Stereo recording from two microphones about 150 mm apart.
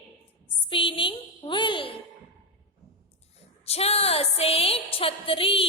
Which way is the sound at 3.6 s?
45° left (ahead or behind).